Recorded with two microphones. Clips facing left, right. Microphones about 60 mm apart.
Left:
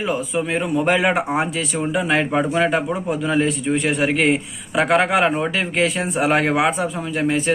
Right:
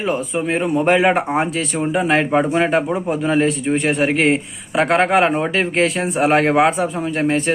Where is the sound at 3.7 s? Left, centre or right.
Centre.